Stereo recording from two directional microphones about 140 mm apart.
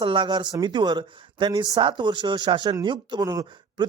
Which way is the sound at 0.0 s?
35° right (ahead or behind).